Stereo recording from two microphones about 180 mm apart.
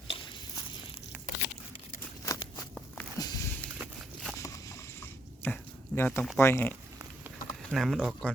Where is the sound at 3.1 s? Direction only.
20° left (ahead or behind).